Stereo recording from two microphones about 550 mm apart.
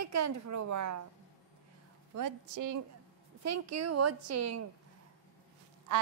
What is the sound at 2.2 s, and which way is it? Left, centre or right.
A woman's voice, right.